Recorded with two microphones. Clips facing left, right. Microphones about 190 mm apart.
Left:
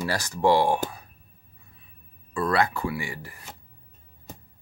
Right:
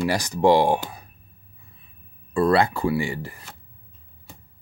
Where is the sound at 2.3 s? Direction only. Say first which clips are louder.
Right 5 dB; 30° right (ahead or behind).